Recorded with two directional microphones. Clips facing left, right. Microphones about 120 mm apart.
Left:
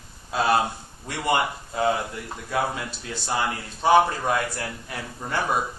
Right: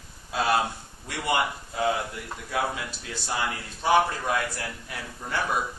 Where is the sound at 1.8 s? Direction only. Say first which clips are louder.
Left 3 dB; 40° left (ahead or behind).